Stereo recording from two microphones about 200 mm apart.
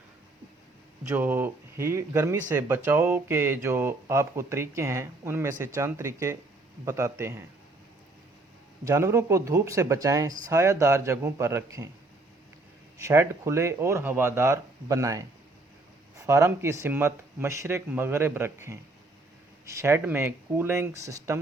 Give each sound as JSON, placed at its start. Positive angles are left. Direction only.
{"t": 1.0, "sound": "speech", "side_deg": -10}
{"t": 8.8, "sound": "speech", "side_deg": -15}
{"t": 13.0, "sound": "speech", "side_deg": -15}